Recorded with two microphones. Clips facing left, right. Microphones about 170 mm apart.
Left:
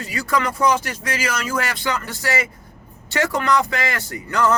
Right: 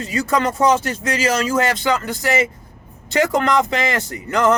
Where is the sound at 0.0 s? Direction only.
25° right (ahead or behind).